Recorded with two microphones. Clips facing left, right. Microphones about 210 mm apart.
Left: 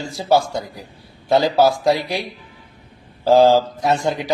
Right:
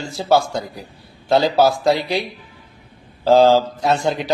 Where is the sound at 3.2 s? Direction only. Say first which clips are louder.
Even; 10° left (ahead or behind).